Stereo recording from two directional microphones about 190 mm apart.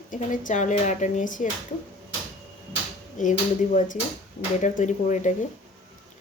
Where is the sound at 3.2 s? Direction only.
40° left (ahead or behind).